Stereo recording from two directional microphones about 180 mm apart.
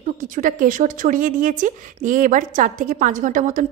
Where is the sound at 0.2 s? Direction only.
50° right (ahead or behind).